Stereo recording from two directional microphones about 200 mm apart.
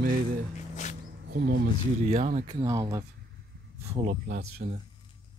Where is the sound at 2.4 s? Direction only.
20° right (ahead or behind).